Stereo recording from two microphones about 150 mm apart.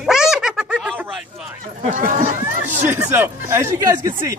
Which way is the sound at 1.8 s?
55° right (ahead or behind).